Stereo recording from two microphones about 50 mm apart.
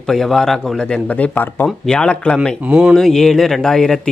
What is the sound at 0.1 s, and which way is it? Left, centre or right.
Speech, centre.